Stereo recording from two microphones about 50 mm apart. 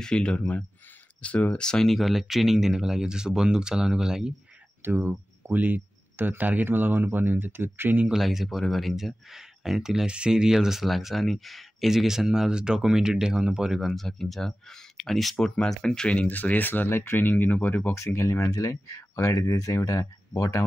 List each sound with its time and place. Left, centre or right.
0.0 s speech: centre
0.4 s speech: left
1.9 s speech: centre
4.8 s speech: right
8.1 s speech: centre
10.0 s speech: centre
13.9 s speech: centre
15.5 s speech: centre
16.2 s speech: left
17.9 s speech: left